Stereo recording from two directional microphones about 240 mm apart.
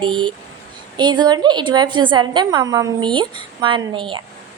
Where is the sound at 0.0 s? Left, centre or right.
Right.